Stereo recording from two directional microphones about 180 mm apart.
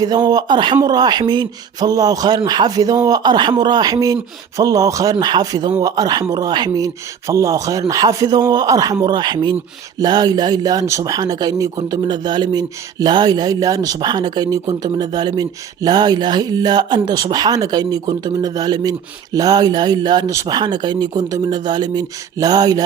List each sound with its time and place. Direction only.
0.0 s speech: 20° right (ahead or behind)